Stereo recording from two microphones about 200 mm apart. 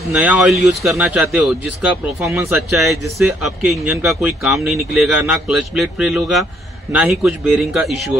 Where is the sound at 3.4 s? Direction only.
Centre (ahead or behind).